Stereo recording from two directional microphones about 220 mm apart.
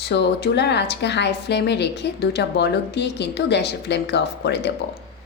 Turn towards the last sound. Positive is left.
turn(degrees=50)  # may be behind; listen again after turning